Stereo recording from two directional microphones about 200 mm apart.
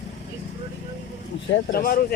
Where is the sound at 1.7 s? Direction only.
45° left (ahead or behind).